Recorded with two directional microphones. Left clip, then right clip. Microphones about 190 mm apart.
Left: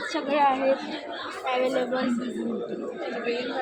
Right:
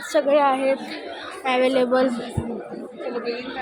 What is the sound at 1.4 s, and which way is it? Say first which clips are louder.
Speech: right 6 dB; 50° right (ahead or behind).